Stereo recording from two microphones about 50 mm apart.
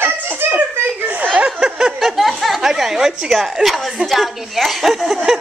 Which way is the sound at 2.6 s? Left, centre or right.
Centre.